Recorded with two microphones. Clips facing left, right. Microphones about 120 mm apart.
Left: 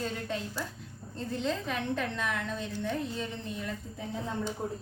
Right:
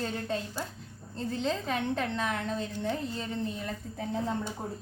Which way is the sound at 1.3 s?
35° right (ahead or behind).